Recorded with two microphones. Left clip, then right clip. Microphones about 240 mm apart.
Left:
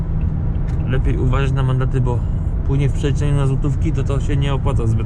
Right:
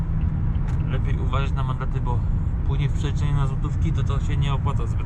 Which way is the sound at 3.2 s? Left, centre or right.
Left.